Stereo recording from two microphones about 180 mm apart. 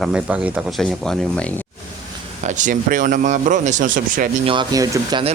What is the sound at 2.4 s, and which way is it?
Speech, 40° right (ahead or behind).